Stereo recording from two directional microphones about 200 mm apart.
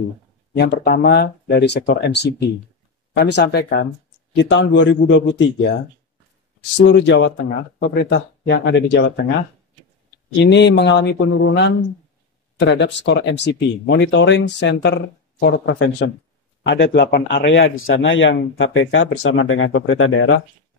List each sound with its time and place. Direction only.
0.6 s speech: 55° left (ahead or behind)
6.8 s speech: 60° left (ahead or behind)
10.4 s speech: 60° left (ahead or behind); by 20.4 s 80° left